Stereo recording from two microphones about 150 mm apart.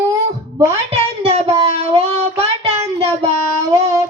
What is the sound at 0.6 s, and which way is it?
Speech, 45° right (ahead or behind).